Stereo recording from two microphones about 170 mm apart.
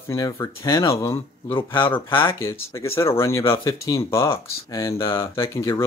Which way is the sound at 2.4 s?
15° left (ahead or behind).